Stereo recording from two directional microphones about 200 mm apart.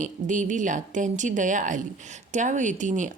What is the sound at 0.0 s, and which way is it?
Speech, 40° right (ahead or behind).